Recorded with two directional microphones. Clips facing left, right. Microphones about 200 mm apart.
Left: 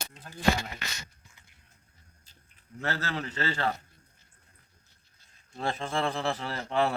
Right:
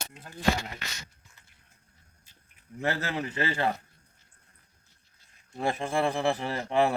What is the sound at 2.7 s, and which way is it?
A man's voice, 15° right (ahead or behind).